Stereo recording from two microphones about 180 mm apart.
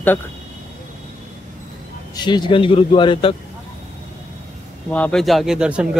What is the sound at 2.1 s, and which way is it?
A man's voice, 25° left (ahead or behind).